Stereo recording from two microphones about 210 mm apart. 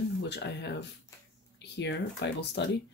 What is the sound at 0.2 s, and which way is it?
Speech, 55° left (ahead or behind).